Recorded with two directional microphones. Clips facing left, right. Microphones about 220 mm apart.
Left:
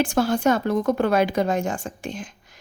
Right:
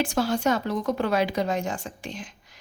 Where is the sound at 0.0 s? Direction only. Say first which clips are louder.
Left 4 dB; 50° left (ahead or behind).